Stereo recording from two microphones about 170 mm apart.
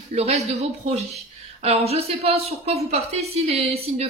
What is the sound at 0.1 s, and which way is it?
Speech, 40° right (ahead or behind).